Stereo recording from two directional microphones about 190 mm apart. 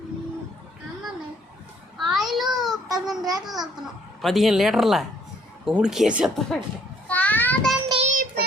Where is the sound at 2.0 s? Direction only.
Centre (ahead or behind).